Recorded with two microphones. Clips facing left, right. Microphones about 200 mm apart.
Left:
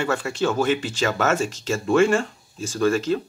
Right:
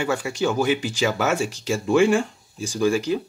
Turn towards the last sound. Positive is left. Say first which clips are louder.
# even
turn(degrees=-10)  # may be behind; listen again after turning